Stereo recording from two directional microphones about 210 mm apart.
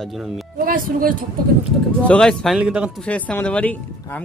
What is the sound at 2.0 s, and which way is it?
Speech, 5° left (ahead or behind).